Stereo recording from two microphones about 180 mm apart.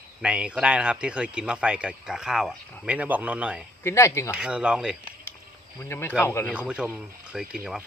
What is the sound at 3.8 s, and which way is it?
Speech, 15° left (ahead or behind).